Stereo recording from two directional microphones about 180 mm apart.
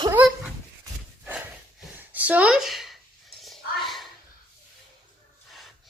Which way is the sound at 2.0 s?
10° right (ahead or behind).